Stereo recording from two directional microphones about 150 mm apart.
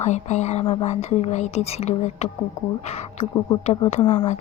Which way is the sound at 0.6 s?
35° left (ahead or behind).